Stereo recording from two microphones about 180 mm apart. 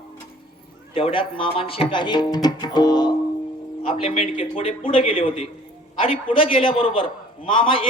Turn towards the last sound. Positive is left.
turn(degrees=30)  # may be behind; listen again after turning